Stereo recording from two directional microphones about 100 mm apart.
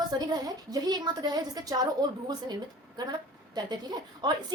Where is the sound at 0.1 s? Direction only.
40° right (ahead or behind).